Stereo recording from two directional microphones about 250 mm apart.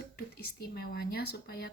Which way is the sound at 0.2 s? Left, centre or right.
Left.